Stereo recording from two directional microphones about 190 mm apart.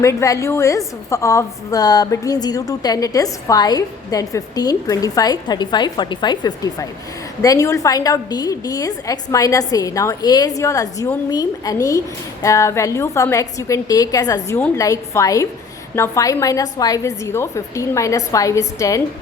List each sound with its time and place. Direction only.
0.0 s a woman's voice: 15° left (ahead or behind)